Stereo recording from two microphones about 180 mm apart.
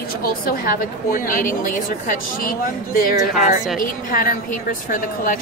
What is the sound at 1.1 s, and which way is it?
A woman's voice, 50° left (ahead or behind).